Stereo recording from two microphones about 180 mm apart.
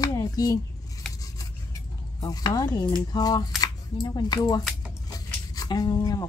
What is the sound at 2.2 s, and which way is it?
Speech, 20° left (ahead or behind).